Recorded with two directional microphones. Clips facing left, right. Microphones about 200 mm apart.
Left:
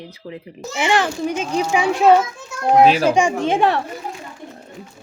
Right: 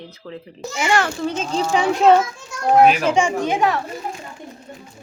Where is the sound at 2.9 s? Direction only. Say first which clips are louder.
Left 2 dB; 30° left (ahead or behind).